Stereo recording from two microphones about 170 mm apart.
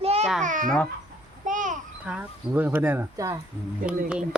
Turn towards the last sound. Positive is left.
turn(degrees=-5)  # may be behind; listen again after turning